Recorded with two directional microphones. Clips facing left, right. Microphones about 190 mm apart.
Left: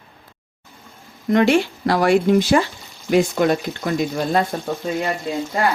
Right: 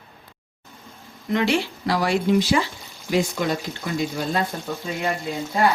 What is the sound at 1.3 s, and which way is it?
Speech, 50° left (ahead or behind).